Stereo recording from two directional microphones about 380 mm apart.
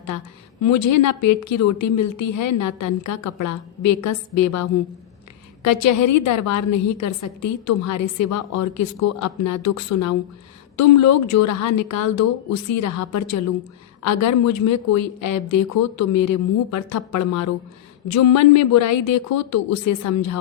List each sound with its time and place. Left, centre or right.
0.6 s a woman's voice: left